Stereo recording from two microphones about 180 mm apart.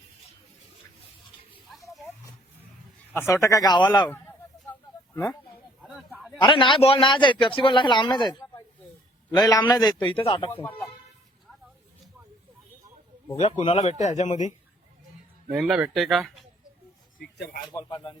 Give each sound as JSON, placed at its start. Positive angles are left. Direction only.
{"t": 1.7, "sound": "a sound", "side_deg": 0}
{"t": 3.2, "sound": "a man's voice", "side_deg": 15}
{"t": 5.8, "sound": "a sound", "side_deg": 0}
{"t": 6.4, "sound": "a man's voice", "side_deg": 25}
{"t": 10.5, "sound": "speech", "side_deg": 10}
{"t": 13.3, "sound": "speech", "side_deg": 35}
{"t": 15.5, "sound": "speech", "side_deg": -5}
{"t": 17.2, "sound": "speech", "side_deg": 60}
{"t": 17.7, "sound": "a man's voice", "side_deg": 20}